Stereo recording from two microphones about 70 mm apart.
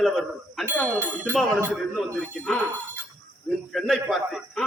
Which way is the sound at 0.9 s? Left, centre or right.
Right.